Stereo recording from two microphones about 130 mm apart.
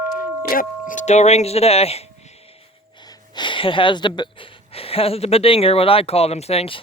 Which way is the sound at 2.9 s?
30° left (ahead or behind).